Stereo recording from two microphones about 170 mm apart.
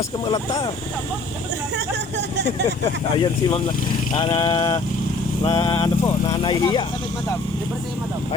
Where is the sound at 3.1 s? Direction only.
25° left (ahead or behind).